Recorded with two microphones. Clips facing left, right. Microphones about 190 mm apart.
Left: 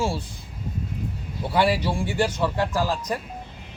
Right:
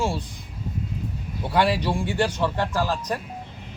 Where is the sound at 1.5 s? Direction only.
10° left (ahead or behind).